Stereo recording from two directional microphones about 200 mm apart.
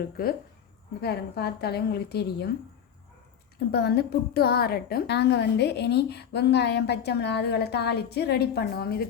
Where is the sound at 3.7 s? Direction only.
55° left (ahead or behind).